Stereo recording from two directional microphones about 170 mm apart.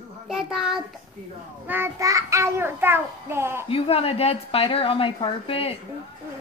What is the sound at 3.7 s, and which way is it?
A woman's voice, 35° left (ahead or behind).